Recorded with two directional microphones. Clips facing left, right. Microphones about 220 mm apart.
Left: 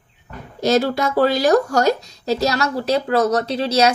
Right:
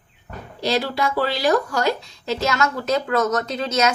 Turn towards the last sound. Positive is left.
turn(degrees=35)  # may be behind; listen again after turning